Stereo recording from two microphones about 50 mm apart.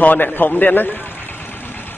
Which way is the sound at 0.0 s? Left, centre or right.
Left.